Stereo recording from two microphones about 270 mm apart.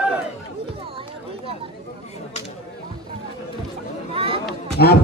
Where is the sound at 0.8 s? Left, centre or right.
Centre.